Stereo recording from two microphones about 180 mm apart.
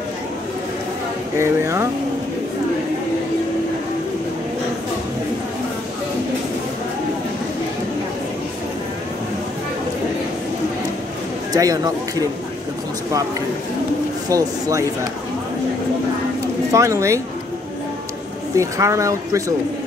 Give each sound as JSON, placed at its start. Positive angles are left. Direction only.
{"t": 1.3, "sound": "speech", "side_deg": -15}
{"t": 11.5, "sound": "speech", "side_deg": -20}
{"t": 14.3, "sound": "speech", "side_deg": -20}
{"t": 16.7, "sound": "speech", "side_deg": -15}
{"t": 18.5, "sound": "speech", "side_deg": -15}